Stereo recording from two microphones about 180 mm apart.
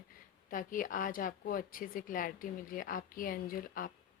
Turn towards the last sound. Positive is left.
turn(degrees=50)  # may be behind; listen again after turning